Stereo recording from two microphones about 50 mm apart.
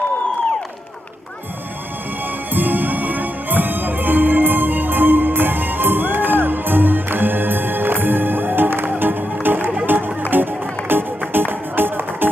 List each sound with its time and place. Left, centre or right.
2.5 s music: right